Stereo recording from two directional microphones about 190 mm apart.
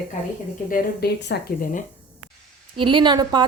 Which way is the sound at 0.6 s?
50° left (ahead or behind).